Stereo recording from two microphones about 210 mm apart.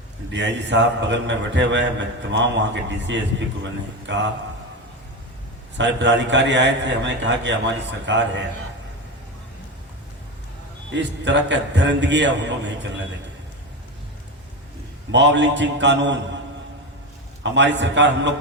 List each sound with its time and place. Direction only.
0.3 s a man's voice: 55° right (ahead or behind)
5.7 s a man's voice: 55° right (ahead or behind)
10.9 s a man's voice: 55° right (ahead or behind)
15.1 s a man's voice: 60° right (ahead or behind)
17.4 s a man's voice: 60° right (ahead or behind)